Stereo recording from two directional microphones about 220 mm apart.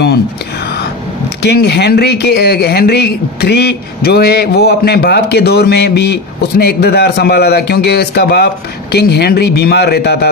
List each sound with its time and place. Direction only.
1.4 s speech: 50° left (ahead or behind)